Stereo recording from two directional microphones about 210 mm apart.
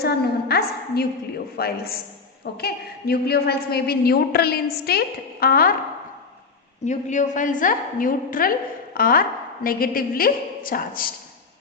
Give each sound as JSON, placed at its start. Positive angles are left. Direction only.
{"t": 0.0, "sound": "a woman's voice", "side_deg": 50}
{"t": 6.8, "sound": "a woman's voice", "side_deg": 35}